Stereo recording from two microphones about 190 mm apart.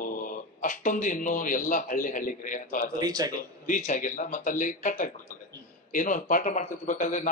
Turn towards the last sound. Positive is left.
turn(degrees=40)  # may be behind; listen again after turning